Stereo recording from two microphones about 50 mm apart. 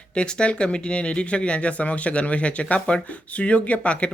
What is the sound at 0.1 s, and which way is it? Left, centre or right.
Speech, centre.